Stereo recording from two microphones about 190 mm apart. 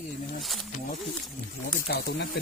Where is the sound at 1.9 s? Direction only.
60° left (ahead or behind).